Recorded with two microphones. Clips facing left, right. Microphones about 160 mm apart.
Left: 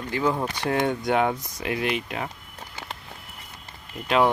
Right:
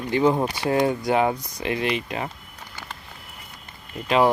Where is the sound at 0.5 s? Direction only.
5° right (ahead or behind).